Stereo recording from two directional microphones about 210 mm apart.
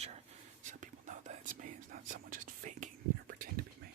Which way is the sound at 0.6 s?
35° right (ahead or behind).